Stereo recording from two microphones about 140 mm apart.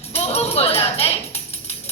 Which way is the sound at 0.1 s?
50° left (ahead or behind).